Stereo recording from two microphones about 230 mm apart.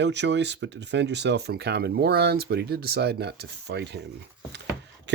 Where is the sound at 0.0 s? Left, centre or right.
Right.